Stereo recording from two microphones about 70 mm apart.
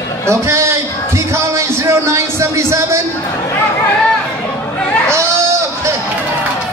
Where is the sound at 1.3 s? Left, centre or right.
Right.